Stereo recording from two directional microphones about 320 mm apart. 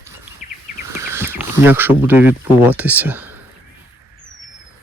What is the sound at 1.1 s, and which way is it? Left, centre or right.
Speech, centre.